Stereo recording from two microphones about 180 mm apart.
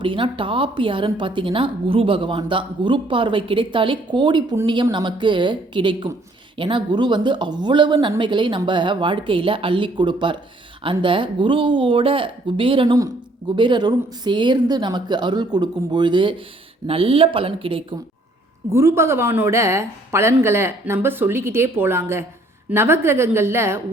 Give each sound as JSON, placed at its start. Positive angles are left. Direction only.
{"t": 0.0, "sound": "a woman's voice", "side_deg": -30}
{"t": 18.7, "sound": "a woman's voice", "side_deg": -15}